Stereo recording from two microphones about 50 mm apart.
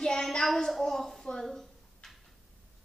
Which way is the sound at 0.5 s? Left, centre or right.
Centre.